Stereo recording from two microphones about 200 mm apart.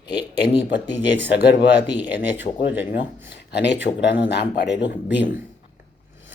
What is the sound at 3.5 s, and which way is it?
Speech, 55° left (ahead or behind).